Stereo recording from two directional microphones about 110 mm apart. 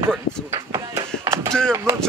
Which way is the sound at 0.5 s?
30° right (ahead or behind).